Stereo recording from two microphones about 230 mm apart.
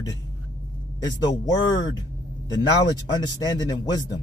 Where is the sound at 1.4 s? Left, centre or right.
Centre.